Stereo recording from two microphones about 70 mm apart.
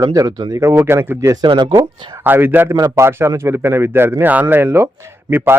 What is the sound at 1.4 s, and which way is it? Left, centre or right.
Speech, right.